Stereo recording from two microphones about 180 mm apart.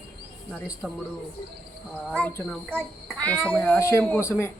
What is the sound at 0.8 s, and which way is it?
A child's voice, centre (ahead or behind).